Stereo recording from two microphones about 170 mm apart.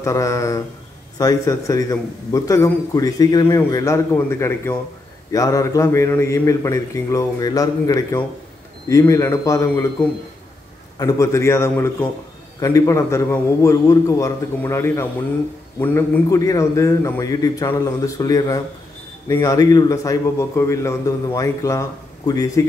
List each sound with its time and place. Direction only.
0.0 s a man's voice: 20° left (ahead or behind)
11.0 s a man's voice: 20° left (ahead or behind)